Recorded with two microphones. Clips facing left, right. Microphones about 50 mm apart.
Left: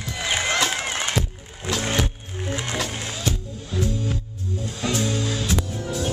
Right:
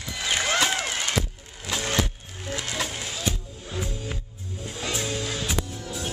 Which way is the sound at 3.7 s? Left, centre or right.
Centre.